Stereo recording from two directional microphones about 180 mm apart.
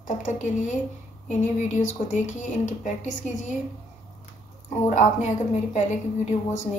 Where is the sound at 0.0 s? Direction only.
45° left (ahead or behind).